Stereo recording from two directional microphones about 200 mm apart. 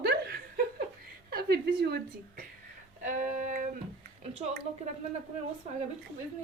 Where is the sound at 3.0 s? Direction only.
40° right (ahead or behind).